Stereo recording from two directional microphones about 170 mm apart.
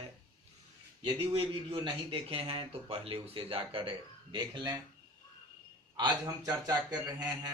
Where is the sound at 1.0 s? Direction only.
30° right (ahead or behind).